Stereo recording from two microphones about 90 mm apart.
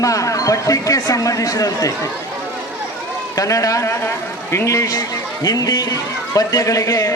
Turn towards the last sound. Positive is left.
turn(degrees=40)  # may be behind; listen again after turning